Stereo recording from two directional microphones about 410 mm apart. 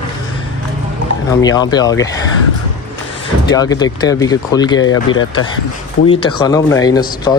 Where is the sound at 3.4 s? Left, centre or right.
Centre.